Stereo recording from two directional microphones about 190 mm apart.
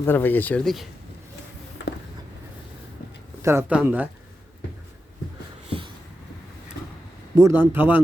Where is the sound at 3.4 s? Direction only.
15° right (ahead or behind).